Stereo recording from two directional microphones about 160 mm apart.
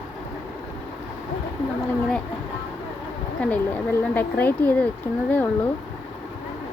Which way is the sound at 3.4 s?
10° left (ahead or behind).